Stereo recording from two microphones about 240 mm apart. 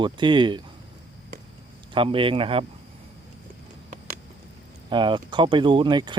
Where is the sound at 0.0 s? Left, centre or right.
Centre.